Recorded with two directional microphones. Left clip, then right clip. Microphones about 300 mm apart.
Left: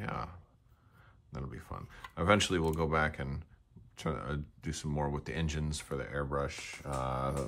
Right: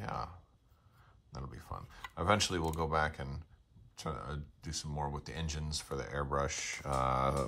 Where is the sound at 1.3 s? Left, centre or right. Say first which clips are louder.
Left 1 dB; centre.